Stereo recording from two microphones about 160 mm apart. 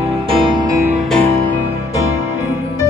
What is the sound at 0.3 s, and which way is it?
Music, 30° right (ahead or behind).